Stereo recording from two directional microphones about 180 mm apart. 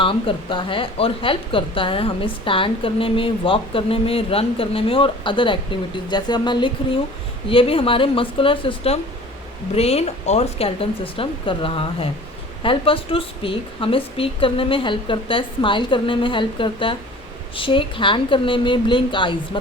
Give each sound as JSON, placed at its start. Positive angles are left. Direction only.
{"t": 0.0, "sound": "speech", "side_deg": 30}